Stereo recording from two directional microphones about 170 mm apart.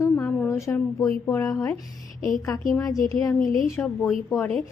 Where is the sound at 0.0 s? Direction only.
15° left (ahead or behind).